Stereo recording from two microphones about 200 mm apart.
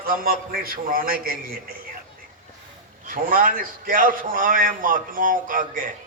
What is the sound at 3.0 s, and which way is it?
A man's voice, 45° right (ahead or behind).